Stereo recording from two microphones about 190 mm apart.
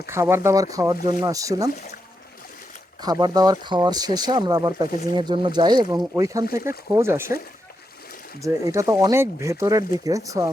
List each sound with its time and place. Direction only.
0.1 s speech: 15° right (ahead or behind)
3.0 s speech: 20° right (ahead or behind)
6.4 s speech: 50° left (ahead or behind)
6.9 s speech: 15° right (ahead or behind)
8.4 s speech: 15° right (ahead or behind)